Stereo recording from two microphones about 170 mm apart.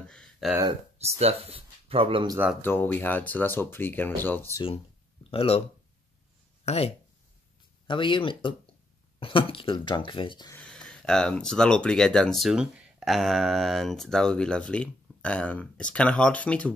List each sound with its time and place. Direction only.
0.0 s a sound: 5° left (ahead or behind)
0.9 s speech: 40° right (ahead or behind)
2.6 s speech: 10° left (ahead or behind)
5.3 s speech: 35° left (ahead or behind)
6.6 s speech: 40° left (ahead or behind)
7.8 s speech: 30° left (ahead or behind)
10.5 s speech: 5° left (ahead or behind)